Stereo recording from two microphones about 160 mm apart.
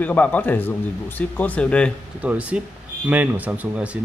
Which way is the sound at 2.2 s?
10° right (ahead or behind).